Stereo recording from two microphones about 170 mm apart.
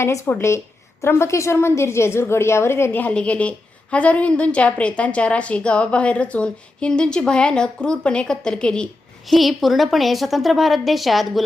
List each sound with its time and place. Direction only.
0.0 s a woman's voice: 15° left (ahead or behind)